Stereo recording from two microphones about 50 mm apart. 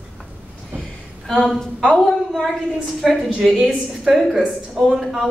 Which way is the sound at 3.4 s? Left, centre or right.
Centre.